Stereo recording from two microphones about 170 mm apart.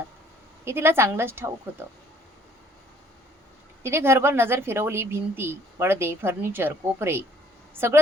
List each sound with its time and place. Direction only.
0.6 s speech: 15° right (ahead or behind)
3.8 s speech: 15° right (ahead or behind)